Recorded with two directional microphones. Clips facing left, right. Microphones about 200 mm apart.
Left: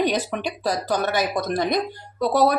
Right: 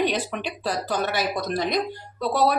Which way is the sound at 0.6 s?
45° left (ahead or behind).